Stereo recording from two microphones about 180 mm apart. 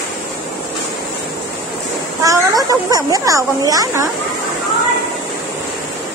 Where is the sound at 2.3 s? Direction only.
20° right (ahead or behind).